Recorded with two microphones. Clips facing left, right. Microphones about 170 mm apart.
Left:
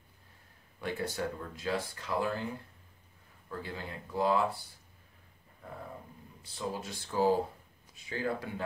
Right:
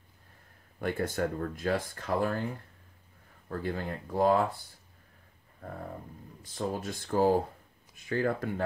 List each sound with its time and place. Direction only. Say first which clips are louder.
0.7 s speech: right 4 dB; 50° right (ahead or behind)
3.4 s speech: right 7 dB; 50° right (ahead or behind)
6.4 s speech: right 4 dB; 50° right (ahead or behind)